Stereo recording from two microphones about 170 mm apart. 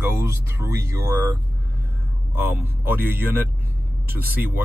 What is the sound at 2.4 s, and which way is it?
Speech, 10° right (ahead or behind).